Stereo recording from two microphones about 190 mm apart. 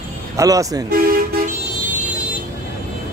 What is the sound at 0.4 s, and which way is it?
Speech, 15° right (ahead or behind).